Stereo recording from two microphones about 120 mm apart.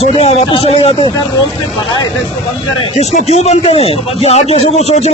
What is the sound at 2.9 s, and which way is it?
Speech, 65° left (ahead or behind).